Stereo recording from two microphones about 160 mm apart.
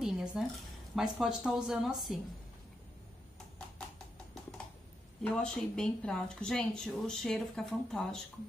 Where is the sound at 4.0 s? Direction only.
5° left (ahead or behind).